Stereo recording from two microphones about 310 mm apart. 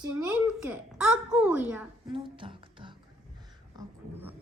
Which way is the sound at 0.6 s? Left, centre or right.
Centre.